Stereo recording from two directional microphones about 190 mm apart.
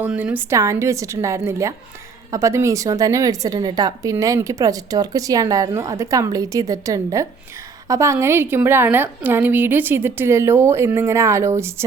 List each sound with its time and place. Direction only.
0.0 s a woman's voice: 5° right (ahead or behind)